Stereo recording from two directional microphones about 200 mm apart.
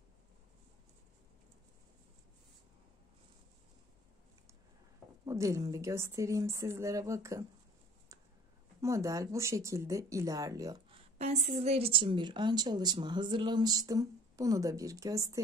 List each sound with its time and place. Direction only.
5.2 s a woman's voice: 15° right (ahead or behind)
8.8 s a woman's voice: 15° right (ahead or behind)
11.1 s a woman's voice: 35° right (ahead or behind); by 15.4 s 15° right (ahead or behind)